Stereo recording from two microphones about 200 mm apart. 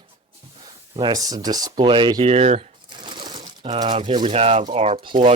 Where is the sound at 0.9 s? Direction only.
20° right (ahead or behind).